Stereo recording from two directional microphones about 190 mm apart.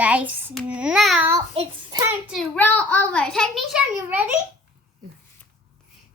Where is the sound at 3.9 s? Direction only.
10° right (ahead or behind).